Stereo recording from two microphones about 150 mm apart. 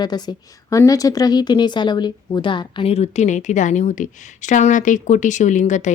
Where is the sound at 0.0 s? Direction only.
30° left (ahead or behind).